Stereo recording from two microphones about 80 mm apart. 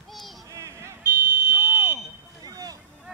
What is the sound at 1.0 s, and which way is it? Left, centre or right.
Smoke detector, centre.